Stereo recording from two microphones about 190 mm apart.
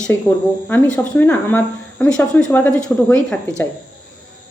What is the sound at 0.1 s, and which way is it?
Speech, 15° left (ahead or behind).